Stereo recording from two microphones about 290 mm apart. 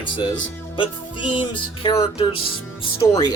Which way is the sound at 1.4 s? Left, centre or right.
Centre.